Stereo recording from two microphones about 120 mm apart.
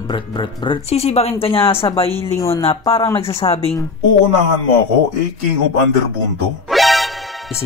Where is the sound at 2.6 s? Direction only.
50° left (ahead or behind).